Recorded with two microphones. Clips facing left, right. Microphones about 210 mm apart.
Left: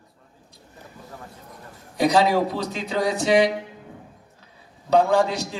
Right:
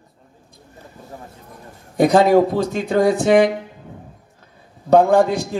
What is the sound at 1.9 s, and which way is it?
A man's voice, 50° right (ahead or behind).